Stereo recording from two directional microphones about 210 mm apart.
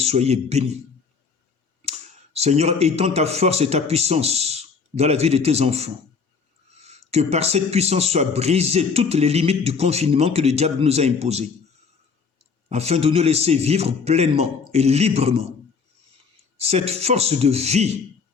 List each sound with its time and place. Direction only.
0.0 s a man's voice: 30° right (ahead or behind)
1.8 s speech: 30° right (ahead or behind)
12.6 s speech: 30° right (ahead or behind)
16.6 s speech: 30° right (ahead or behind)